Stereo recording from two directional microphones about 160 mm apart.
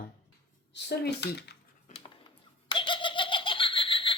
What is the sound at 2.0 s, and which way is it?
Laughter, 30° left (ahead or behind).